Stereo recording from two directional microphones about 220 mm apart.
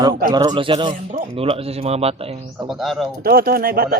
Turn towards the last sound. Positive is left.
turn(degrees=-45)  # may be behind; listen again after turning